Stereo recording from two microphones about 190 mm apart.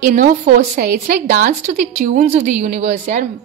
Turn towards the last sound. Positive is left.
turn(degrees=-40)  # may be behind; listen again after turning